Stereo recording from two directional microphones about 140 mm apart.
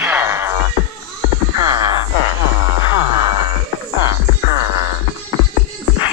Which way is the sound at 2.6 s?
30° right (ahead or behind).